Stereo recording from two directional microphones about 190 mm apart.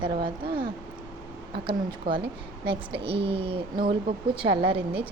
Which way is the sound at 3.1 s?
30° right (ahead or behind).